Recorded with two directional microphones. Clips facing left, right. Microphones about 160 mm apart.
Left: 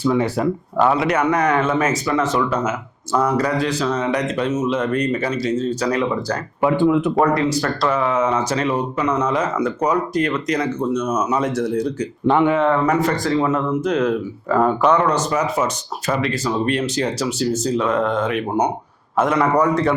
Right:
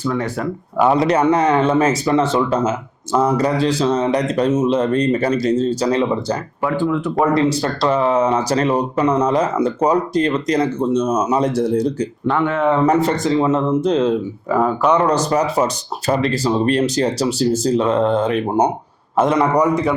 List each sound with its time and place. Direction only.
0.0 s speech: 10° left (ahead or behind)
0.9 s speech: 30° right (ahead or behind)
6.6 s speech: 20° left (ahead or behind)
7.3 s speech: 30° right (ahead or behind)
12.3 s speech: 15° left (ahead or behind)
12.7 s speech: 30° right (ahead or behind)
14.5 s speech: centre (ahead or behind)
15.0 s speech: 35° right (ahead or behind)
19.1 s speech: 20° right (ahead or behind)